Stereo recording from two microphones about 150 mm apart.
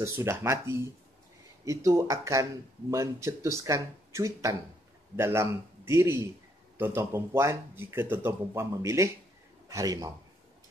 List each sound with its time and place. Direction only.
0.0 s speech: 20° right (ahead or behind)